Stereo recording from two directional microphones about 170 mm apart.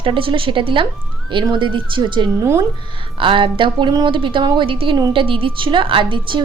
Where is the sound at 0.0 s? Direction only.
30° right (ahead or behind).